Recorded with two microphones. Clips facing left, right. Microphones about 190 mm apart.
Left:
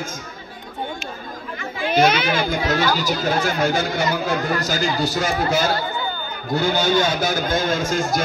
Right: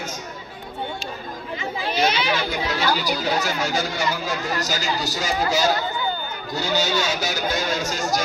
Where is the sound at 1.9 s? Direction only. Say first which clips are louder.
Left 5 dB; 50° left (ahead or behind).